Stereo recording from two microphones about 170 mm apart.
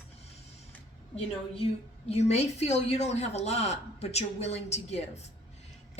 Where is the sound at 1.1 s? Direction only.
35° left (ahead or behind).